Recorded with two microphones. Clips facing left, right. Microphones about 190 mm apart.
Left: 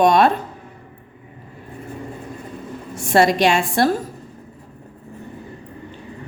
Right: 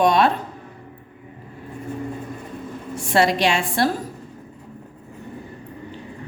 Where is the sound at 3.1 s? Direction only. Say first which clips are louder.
Left 3 dB; 45° left (ahead or behind).